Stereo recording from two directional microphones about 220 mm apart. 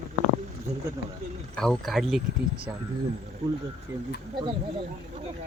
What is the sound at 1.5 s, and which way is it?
Speech, 5° left (ahead or behind).